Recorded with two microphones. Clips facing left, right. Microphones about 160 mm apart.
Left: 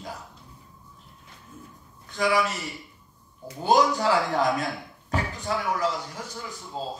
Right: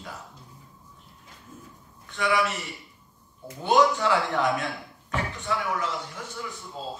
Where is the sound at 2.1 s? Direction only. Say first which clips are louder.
Left 1 dB; 40° left (ahead or behind).